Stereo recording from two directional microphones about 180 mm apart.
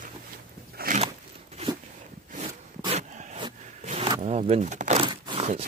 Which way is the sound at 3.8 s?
35° right (ahead or behind).